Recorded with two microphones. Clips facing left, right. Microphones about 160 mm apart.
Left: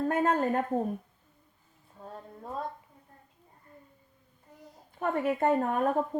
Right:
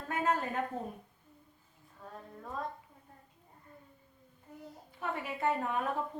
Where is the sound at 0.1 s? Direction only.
50° left (ahead or behind).